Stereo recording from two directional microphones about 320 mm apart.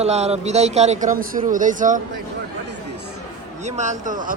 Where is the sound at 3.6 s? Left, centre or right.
Right.